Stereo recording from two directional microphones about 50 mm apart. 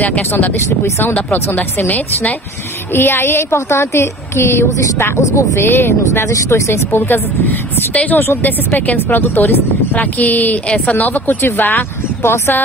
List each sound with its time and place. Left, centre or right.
0.6 s speech: left
1.0 s a woman's voice: left
2.9 s speech: left
3.5 s speech: left
5.1 s speech: left
5.7 s speech: left
6.3 s speech: left
7.0 s speech: left
7.9 s a woman's voice: left
8.4 s a woman's voice: left
9.9 s a woman's voice: left